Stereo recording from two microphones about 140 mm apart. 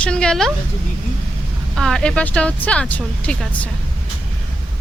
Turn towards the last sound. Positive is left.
turn(degrees=10)  # may be behind; listen again after turning